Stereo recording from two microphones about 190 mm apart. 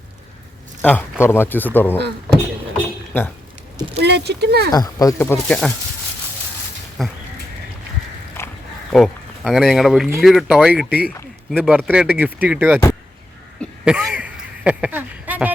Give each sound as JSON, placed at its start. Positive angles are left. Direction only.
{"t": 0.8, "sound": "a man's voice", "side_deg": 10}
{"t": 3.1, "sound": "speech", "side_deg": 10}
{"t": 3.9, "sound": "speech", "side_deg": -60}
{"t": 4.7, "sound": "speech", "side_deg": 20}
{"t": 7.0, "sound": "speech", "side_deg": 0}
{"t": 8.4, "sound": "pig", "side_deg": 15}
{"t": 8.9, "sound": "speech", "side_deg": 0}
{"t": 10.8, "sound": "speech", "side_deg": 55}
{"t": 11.5, "sound": "speech", "side_deg": -5}
{"t": 13.6, "sound": "throat clearing", "side_deg": -5}